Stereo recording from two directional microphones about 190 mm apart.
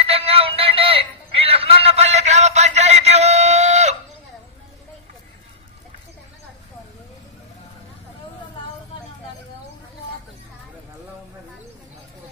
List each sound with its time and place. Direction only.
0.0 s synthetic singing: 30° right (ahead or behind)